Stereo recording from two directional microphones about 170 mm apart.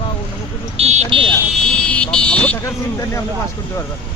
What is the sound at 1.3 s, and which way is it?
Vehicle, 5° left (ahead or behind).